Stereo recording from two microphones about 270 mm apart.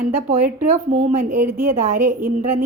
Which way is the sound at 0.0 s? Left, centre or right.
Right.